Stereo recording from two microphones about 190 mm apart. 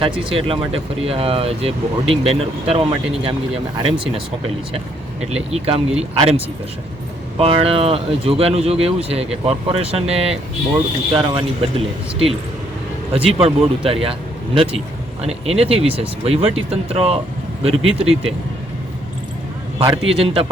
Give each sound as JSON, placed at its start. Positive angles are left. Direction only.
{"t": 0.0, "sound": "speech", "side_deg": -30}
{"t": 5.3, "sound": "speech", "side_deg": -30}
{"t": 13.2, "sound": "speech", "side_deg": -30}
{"t": 19.8, "sound": "speech", "side_deg": -25}